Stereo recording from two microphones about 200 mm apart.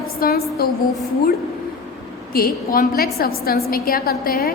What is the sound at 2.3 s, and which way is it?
A woman's voice, 45° left (ahead or behind).